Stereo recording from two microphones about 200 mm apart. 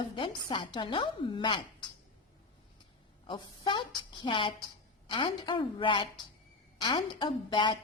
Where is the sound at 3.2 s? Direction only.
25° left (ahead or behind).